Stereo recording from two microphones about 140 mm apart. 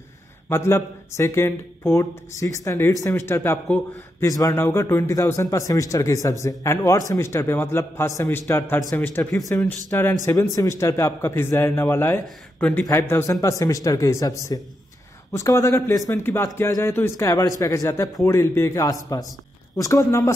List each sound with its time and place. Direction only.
0.5 s a man's voice: 20° left (ahead or behind)